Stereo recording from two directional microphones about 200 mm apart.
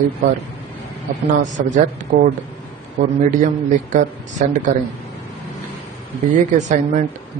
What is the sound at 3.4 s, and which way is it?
Speech, 40° right (ahead or behind).